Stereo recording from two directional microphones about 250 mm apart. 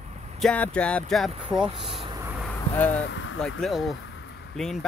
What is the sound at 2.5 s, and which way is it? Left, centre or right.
Speech, centre.